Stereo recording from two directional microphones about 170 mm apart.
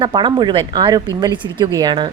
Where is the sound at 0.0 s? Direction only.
30° right (ahead or behind).